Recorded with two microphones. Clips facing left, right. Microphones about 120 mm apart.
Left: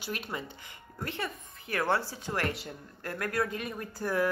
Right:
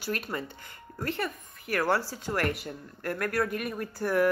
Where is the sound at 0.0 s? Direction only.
15° left (ahead or behind).